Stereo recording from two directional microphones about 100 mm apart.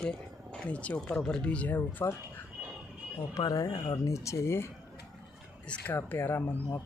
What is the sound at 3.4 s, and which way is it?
Speech, 40° left (ahead or behind).